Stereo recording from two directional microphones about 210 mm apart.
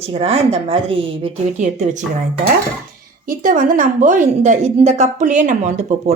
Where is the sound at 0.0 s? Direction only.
30° right (ahead or behind).